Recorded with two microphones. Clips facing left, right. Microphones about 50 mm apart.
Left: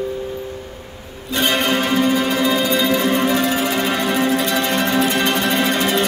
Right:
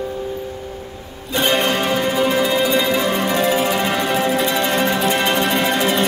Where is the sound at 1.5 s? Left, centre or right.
Centre.